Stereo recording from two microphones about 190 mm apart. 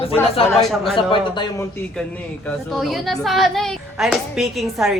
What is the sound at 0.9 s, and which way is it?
Speech, 25° left (ahead or behind).